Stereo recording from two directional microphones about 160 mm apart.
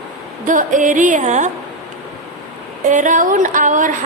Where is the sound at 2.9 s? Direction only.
50° right (ahead or behind).